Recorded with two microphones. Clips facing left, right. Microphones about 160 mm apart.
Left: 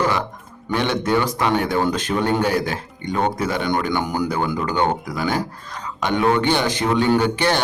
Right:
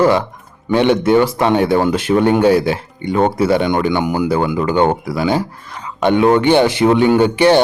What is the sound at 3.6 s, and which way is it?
Speech, 20° right (ahead or behind).